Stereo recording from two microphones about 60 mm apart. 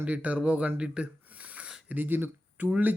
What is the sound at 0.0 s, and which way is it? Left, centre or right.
Speech, right.